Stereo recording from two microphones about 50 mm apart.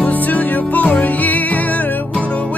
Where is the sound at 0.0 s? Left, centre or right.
Left.